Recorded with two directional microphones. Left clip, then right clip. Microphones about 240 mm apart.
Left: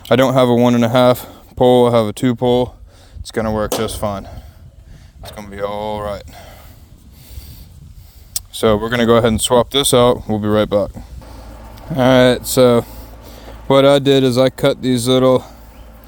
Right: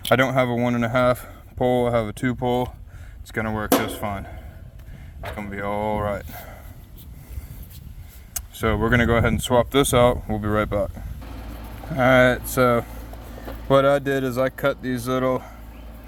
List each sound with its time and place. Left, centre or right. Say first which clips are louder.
0.1 s speech: left 7 dB; left
5.4 s speech: left 4 dB; left
8.6 s speech: left 7 dB; left
10.8 s speech: left 8 dB; left
11.9 s speech: left 5 dB; left
13.7 s speech: left 7 dB; left
14.1 s speech: left 10 dB; left